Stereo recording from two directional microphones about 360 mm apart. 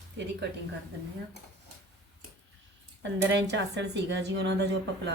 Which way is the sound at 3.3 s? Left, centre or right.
Right.